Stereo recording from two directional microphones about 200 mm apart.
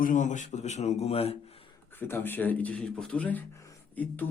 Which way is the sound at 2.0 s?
10° left (ahead or behind).